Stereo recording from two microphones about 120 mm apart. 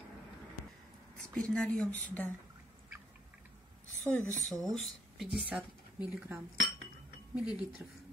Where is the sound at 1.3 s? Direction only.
10° left (ahead or behind).